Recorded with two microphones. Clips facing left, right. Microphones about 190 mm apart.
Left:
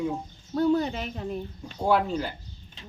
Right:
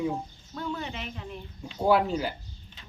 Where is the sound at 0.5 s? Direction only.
40° left (ahead or behind).